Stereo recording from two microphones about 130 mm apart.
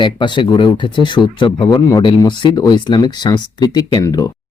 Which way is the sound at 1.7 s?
25° left (ahead or behind).